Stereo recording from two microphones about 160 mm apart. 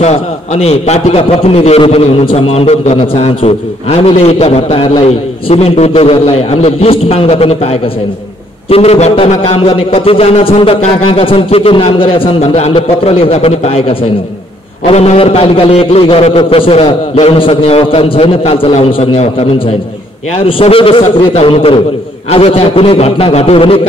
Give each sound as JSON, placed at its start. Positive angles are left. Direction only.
{"t": 0.0, "sound": "a man's voice", "side_deg": 45}
{"t": 20.3, "sound": "a man's voice", "side_deg": 35}